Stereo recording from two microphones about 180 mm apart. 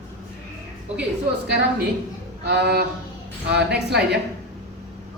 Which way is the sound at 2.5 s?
65° right (ahead or behind).